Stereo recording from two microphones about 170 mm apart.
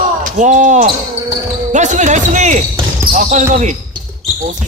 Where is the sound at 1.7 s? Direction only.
45° right (ahead or behind).